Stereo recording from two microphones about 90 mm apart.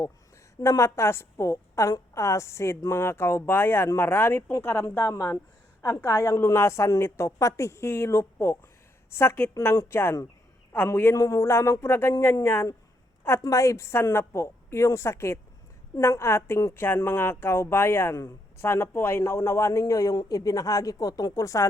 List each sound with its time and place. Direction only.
0.6 s a woman's voice: 35° left (ahead or behind)